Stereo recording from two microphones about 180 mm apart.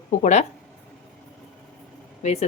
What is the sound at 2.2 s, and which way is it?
Speech, 35° left (ahead or behind).